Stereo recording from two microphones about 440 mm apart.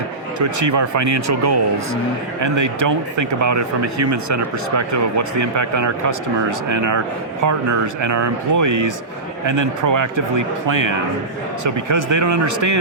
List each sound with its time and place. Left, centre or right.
0.3 s speech: right
8.0 s speech: right